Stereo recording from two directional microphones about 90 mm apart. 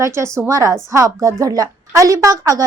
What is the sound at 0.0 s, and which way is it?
A woman's voice, 30° right (ahead or behind).